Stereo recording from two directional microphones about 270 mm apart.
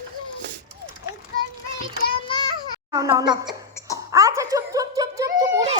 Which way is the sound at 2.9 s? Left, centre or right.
Centre.